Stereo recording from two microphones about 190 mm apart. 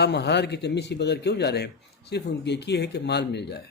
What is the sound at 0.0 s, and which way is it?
Speech, 65° left (ahead or behind).